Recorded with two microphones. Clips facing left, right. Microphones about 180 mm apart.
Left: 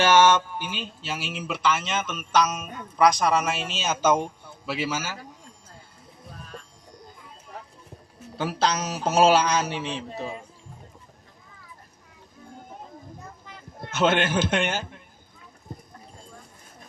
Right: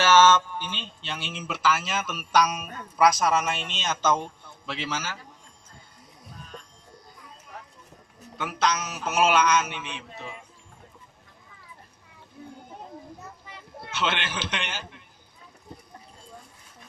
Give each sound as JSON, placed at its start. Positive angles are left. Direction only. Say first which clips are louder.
{"t": 0.0, "sound": "speech", "louder": "even", "side_deg": 15}
{"t": 8.4, "sound": "a man's voice", "louder": "left 2 dB", "side_deg": 30}
{"t": 13.8, "sound": "a man's voice", "louder": "left 7 dB", "side_deg": 45}